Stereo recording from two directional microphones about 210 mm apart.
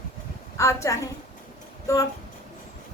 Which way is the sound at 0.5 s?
15° left (ahead or behind).